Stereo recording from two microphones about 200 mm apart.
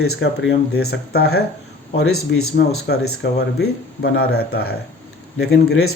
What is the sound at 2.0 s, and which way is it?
Speech, 90° left.